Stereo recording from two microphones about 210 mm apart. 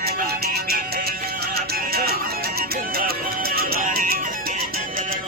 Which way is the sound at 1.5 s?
45° right (ahead or behind).